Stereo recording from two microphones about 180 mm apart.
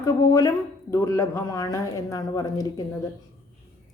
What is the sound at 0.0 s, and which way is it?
A man's voice, 20° left (ahead or behind).